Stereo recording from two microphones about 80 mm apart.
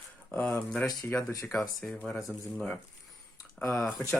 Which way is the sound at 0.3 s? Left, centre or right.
Left.